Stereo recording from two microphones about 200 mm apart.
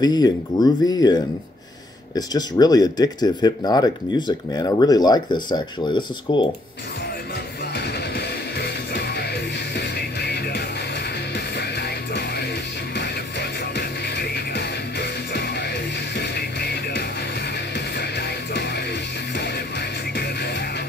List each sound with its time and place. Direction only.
0.0 s speech: 20° left (ahead or behind)
7.7 s music: 55° left (ahead or behind)